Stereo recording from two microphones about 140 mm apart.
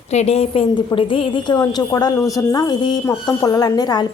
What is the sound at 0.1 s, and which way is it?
A woman's voice, 50° left (ahead or behind).